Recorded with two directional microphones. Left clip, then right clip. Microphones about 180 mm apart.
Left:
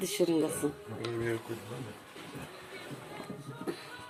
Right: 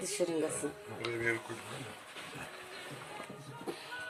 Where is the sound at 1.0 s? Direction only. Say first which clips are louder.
Right 1 dB; 40° left (ahead or behind).